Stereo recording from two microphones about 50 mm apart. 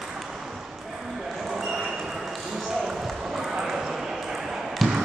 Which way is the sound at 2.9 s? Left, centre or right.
Centre.